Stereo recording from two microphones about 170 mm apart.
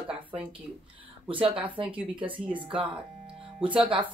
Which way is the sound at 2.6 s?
30° right (ahead or behind).